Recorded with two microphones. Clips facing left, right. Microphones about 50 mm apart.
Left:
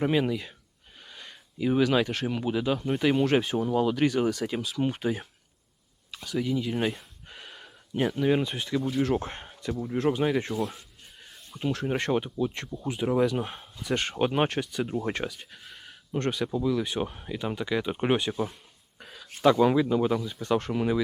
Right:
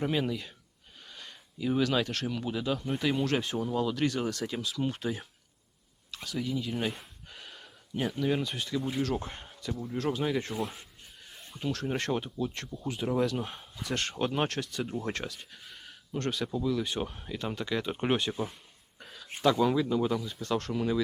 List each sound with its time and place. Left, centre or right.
0.2 s speech: centre
6.2 s speech: centre
7.3 s a sound: centre
8.0 s speech: left
9.6 s speech: centre
10.5 s speech: centre
11.6 s speech: centre
16.1 s speech: left; by 18.5 s centre
18.9 s a sound: centre
19.4 s speech: centre